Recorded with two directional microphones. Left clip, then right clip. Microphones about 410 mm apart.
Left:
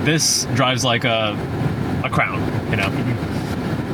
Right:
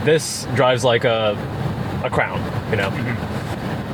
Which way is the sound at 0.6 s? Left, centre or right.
Centre.